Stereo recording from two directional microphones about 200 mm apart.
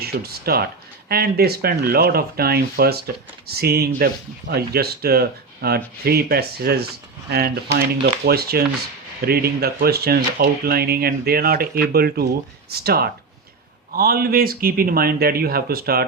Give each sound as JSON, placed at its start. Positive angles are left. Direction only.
{"t": 0.0, "sound": "speech", "side_deg": -50}